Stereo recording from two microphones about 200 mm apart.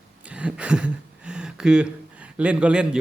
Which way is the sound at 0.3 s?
5° right (ahead or behind).